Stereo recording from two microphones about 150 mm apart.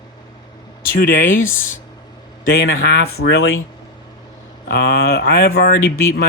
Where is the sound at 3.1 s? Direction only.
90° left.